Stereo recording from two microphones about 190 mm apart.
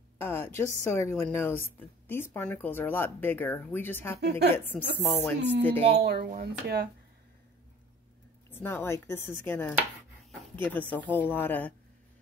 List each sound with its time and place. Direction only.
0.2 s a sound: 10° left (ahead or behind)
0.6 s speech: 15° left (ahead or behind)
5.8 s speech: 35° right (ahead or behind)
6.0 s speech: 55° right (ahead or behind)
8.5 s speech: 10° left (ahead or behind)